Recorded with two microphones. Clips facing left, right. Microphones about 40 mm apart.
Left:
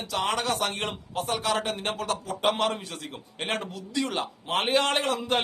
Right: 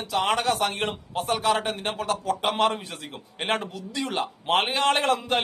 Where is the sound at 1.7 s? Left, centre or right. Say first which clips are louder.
Right 1 dB; centre.